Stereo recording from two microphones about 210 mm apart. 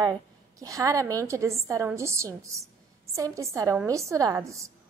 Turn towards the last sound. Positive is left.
turn(degrees=-15)  # may be behind; listen again after turning